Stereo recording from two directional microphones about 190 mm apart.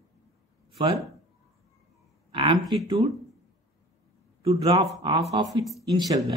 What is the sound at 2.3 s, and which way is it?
Speech, 25° right (ahead or behind).